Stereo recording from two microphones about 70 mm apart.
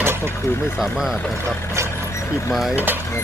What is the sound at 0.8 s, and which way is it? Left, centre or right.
Speech, centre.